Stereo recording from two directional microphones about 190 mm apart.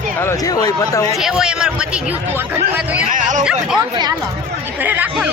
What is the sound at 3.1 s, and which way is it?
Speech, 40° right (ahead or behind).